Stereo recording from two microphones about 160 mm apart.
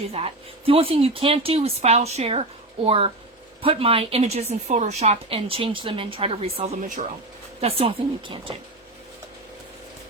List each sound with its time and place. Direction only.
0.1 s a woman's voice: 35° right (ahead or behind)
6.8 s speech: 55° right (ahead or behind)
7.6 s a woman's voice: 35° right (ahead or behind)